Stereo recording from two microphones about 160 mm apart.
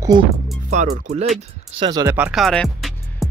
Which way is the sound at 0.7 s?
45° right (ahead or behind).